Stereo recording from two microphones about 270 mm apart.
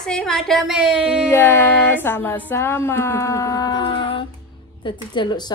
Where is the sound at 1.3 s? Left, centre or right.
Centre.